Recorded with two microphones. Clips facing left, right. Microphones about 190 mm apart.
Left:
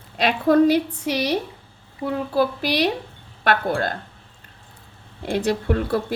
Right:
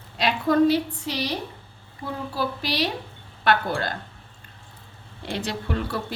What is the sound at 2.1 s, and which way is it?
Speech, 55° left (ahead or behind).